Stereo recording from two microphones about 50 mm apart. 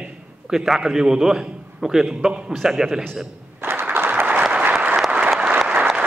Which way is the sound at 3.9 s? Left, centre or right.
Right.